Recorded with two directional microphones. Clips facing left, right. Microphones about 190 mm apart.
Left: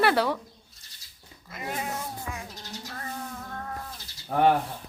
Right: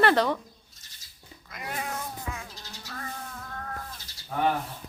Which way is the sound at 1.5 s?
5° left (ahead or behind).